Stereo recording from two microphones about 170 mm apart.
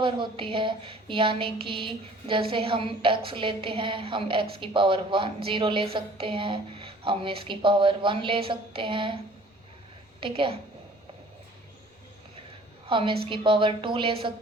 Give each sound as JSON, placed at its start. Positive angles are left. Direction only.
{"t": 0.0, "sound": "a woman's voice", "side_deg": -30}
{"t": 10.2, "sound": "a woman's voice", "side_deg": -30}
{"t": 12.9, "sound": "a woman's voice", "side_deg": -30}